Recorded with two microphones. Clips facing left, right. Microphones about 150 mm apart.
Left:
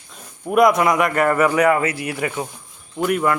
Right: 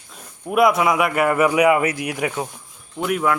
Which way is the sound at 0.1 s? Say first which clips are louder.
Left 3 dB; 5° right (ahead or behind).